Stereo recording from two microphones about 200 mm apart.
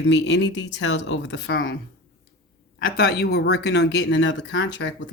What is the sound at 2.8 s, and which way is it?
Speech, 50° left (ahead or behind).